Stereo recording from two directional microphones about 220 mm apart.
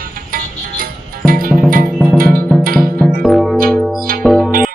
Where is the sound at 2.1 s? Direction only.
40° right (ahead or behind).